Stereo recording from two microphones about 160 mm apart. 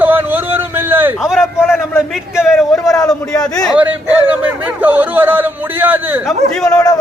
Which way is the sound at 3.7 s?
10° right (ahead or behind).